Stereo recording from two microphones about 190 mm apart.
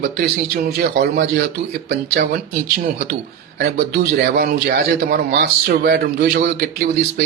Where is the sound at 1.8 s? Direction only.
45° right (ahead or behind).